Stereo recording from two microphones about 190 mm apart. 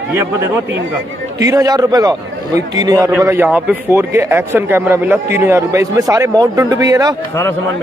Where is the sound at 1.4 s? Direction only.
20° right (ahead or behind).